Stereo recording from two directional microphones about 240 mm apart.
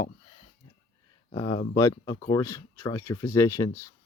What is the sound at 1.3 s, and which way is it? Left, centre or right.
Speech, centre.